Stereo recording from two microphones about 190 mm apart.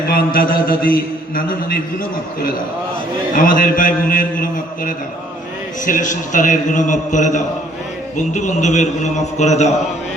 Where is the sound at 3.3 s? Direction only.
45° left (ahead or behind).